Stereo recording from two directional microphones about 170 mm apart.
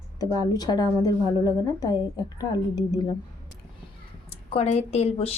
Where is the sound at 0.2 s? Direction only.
20° left (ahead or behind).